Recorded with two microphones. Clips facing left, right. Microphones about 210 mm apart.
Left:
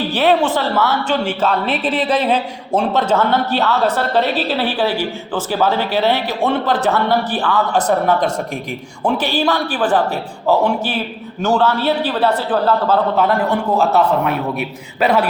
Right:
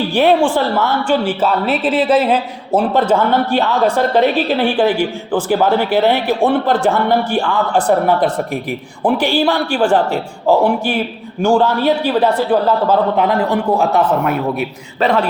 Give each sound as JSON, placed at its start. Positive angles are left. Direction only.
{"t": 0.1, "sound": "a man's voice", "side_deg": -10}
{"t": 9.0, "sound": "a man's voice", "side_deg": -10}
{"t": 11.4, "sound": "a man's voice", "side_deg": -10}
{"t": 15.0, "sound": "a man's voice", "side_deg": 5}